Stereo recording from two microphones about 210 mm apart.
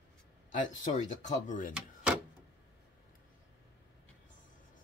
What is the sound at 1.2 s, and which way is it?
Speech, 35° left (ahead or behind).